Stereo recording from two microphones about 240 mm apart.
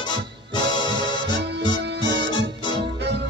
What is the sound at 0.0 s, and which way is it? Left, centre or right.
Music, centre.